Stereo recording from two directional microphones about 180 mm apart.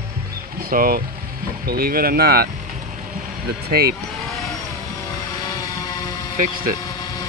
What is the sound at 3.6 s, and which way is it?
Speech, 60° right (ahead or behind).